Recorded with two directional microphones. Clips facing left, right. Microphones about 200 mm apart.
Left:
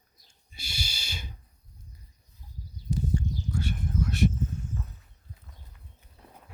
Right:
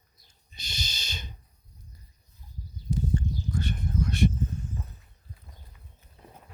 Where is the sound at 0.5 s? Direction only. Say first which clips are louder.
Even; 10° left (ahead or behind).